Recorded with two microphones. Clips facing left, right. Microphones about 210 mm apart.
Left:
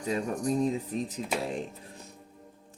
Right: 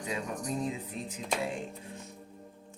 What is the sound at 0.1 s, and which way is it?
Speech, 40° left (ahead or behind).